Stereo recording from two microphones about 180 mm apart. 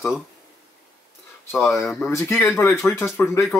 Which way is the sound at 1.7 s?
Centre (ahead or behind).